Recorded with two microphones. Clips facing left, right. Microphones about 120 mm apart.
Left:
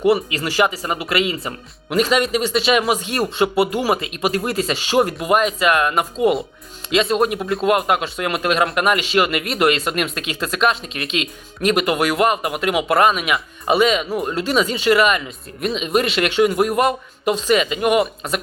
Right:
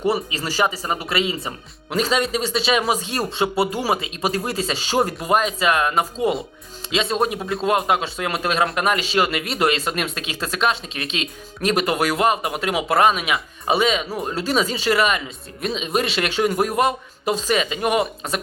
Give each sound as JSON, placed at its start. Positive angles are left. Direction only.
{"t": 0.3, "sound": "speech", "side_deg": -35}